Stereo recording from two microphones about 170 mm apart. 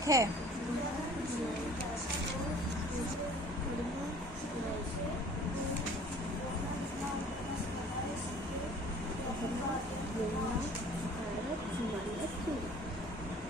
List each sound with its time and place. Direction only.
0.0 s speech: 20° right (ahead or behind)